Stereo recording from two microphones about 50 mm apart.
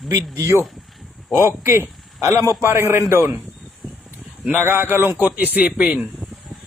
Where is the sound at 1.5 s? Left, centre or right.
Right.